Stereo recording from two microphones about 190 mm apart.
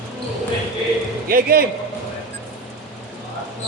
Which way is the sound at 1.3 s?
50° right (ahead or behind).